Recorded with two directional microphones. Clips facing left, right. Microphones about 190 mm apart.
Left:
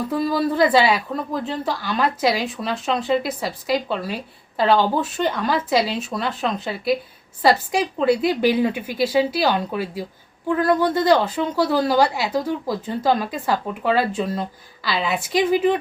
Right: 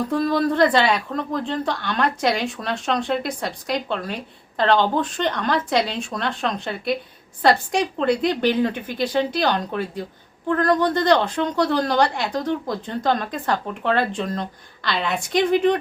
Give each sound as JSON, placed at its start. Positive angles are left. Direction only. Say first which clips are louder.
{"t": 0.1, "sound": "a woman's voice", "louder": "even", "side_deg": 5}